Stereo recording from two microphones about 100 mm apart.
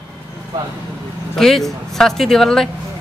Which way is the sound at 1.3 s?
5° left (ahead or behind).